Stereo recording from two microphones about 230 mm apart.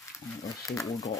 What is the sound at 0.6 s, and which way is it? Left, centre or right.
Speech, centre.